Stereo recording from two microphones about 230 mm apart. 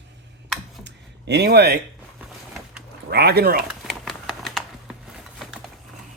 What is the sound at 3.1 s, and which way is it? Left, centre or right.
Speech, right.